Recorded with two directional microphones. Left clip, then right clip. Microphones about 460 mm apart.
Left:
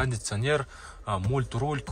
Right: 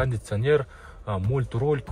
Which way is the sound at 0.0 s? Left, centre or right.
Centre.